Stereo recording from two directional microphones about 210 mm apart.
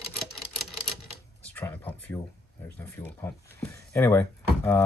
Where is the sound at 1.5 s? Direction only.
10° left (ahead or behind).